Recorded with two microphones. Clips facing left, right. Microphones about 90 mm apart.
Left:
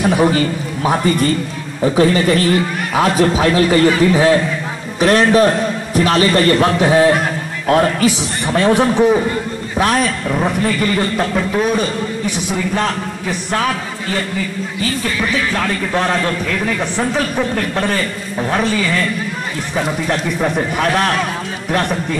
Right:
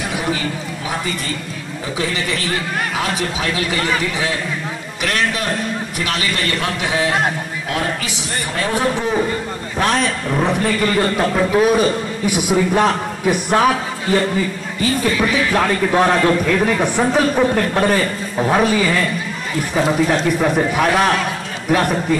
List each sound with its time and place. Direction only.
0.8 s a man's voice: 50° left (ahead or behind)
8.6 s a man's voice: 20° left (ahead or behind)
9.8 s a man's voice: 5° left (ahead or behind); by 13.7 s 15° right (ahead or behind)
15.5 s a man's voice: 15° right (ahead or behind)
20.1 s a man's voice: 5° right (ahead or behind)